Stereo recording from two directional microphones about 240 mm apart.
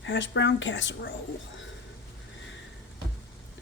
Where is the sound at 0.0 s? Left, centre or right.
Left.